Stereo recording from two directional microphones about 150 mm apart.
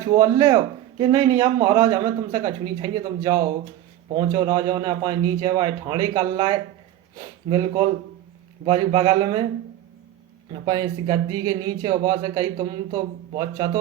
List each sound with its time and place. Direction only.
0.0 s a man's voice: 25° right (ahead or behind)
10.5 s a man's voice: 30° right (ahead or behind)